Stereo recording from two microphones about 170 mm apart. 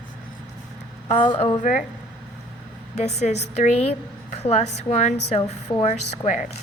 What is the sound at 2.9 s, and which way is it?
A woman's voice, 40° left (ahead or behind).